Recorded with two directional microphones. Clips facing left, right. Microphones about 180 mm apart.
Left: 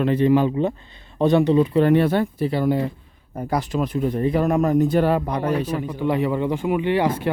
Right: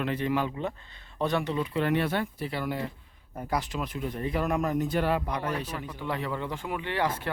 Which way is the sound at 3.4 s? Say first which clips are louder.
Left 8 dB; 40° left (ahead or behind).